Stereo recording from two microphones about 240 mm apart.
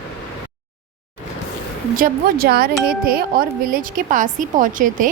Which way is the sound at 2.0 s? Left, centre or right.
Right.